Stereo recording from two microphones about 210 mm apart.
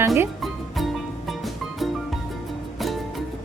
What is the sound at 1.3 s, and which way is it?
Music, centre (ahead or behind).